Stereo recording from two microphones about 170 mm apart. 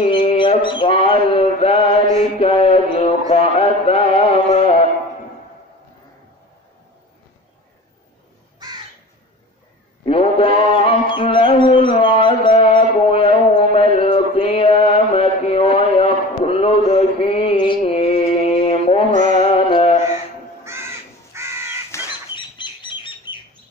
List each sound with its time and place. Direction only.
0.0 s mantra: 30° left (ahead or behind)
10.0 s music: 35° left (ahead or behind)
19.7 s mantra: 35° left (ahead or behind)
21.3 s crow: 15° right (ahead or behind)
21.9 s a sound: 15° left (ahead or behind)
22.3 s bird: 30° left (ahead or behind)